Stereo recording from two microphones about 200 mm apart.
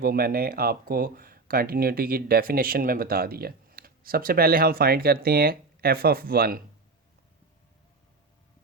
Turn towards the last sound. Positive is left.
turn(degrees=-50)  # may be behind; listen again after turning